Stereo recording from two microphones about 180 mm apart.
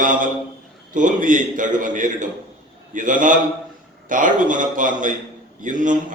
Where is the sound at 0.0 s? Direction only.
45° right (ahead or behind).